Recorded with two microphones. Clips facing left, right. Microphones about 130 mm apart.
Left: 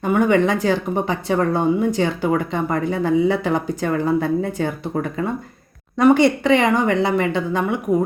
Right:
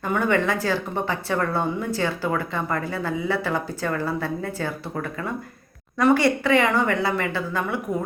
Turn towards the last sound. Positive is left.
turn(degrees=20)  # may be behind; listen again after turning